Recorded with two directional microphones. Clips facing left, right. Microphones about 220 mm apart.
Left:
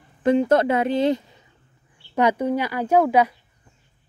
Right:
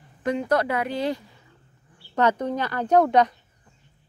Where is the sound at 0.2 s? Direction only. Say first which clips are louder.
Left 6 dB; 25° left (ahead or behind).